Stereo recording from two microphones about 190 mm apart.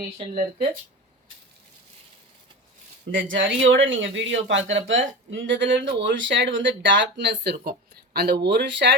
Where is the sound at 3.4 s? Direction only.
75° right (ahead or behind).